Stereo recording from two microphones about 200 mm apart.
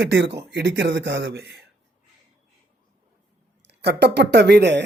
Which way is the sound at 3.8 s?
55° right (ahead or behind).